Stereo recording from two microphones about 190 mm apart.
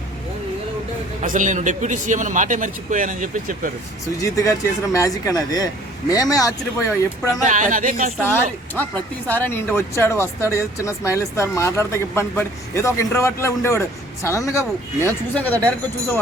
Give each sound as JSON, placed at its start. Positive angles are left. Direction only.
{"t": 1.2, "sound": "a man's voice", "side_deg": -40}
{"t": 4.2, "sound": "speech", "side_deg": 15}
{"t": 7.4, "sound": "speech", "side_deg": -40}
{"t": 8.2, "sound": "speech", "side_deg": 10}